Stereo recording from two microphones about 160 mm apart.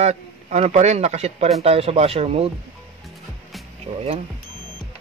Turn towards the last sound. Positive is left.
turn(degrees=-40)  # may be behind; listen again after turning